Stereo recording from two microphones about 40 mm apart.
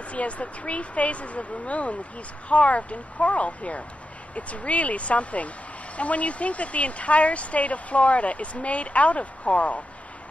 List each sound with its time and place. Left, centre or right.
0.1 s speech: left